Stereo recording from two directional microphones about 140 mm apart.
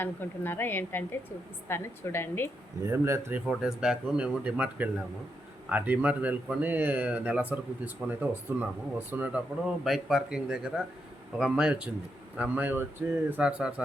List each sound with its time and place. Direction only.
0.0 s a woman's voice: 15° left (ahead or behind)
2.8 s speech: 20° right (ahead or behind)
3.4 s speech: centre (ahead or behind)
9.8 s speech: centre (ahead or behind)